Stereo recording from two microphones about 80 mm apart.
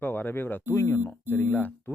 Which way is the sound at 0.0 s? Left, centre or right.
Left.